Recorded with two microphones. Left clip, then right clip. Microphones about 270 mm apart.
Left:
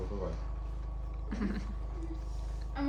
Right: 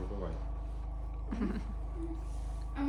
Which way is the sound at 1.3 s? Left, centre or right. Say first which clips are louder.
Even; centre.